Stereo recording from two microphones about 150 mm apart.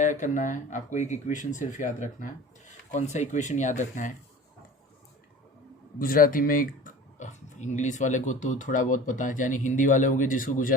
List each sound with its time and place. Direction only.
0.0 s speech: 55° left (ahead or behind)
6.0 s speech: 70° left (ahead or behind)